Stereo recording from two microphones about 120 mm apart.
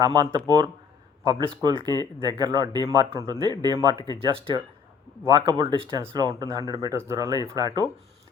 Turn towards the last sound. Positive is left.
turn(degrees=-30)  # may be behind; listen again after turning